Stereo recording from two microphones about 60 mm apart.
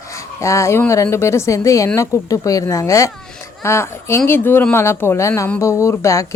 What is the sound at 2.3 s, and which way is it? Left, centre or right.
Speech, left.